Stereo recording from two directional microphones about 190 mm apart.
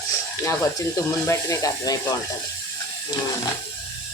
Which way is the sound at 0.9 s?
15° left (ahead or behind).